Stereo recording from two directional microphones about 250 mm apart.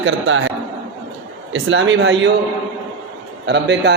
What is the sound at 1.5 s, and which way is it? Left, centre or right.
Speech, right.